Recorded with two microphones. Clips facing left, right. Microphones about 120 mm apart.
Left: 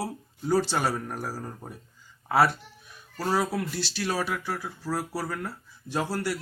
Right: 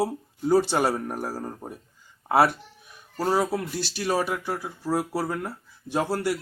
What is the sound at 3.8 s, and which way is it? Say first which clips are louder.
Speech: right 1 dB; 50° right (ahead or behind).